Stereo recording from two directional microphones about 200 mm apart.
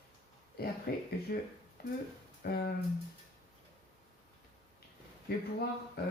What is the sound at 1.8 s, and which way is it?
Speech, 50° left (ahead or behind).